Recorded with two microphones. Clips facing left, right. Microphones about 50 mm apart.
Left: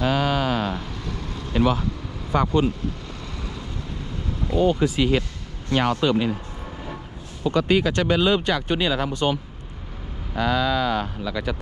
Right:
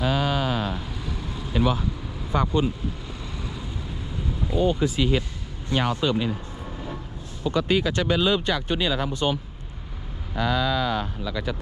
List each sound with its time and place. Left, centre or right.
0.0 s a sound: left
0.9 s vehicle: centre
1.5 s speech: left
2.3 s speech: left
3.4 s vehicle: centre
4.5 s speech: left
7.4 s speech: left
9.1 s speech: left
10.3 s speech: left